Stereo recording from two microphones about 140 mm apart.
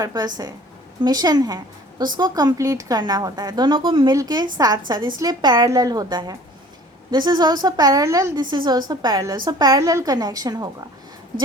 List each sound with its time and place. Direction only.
0.0 s a woman's voice: 25° right (ahead or behind)